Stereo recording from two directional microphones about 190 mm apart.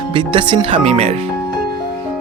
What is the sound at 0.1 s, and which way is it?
Speech, 25° right (ahead or behind).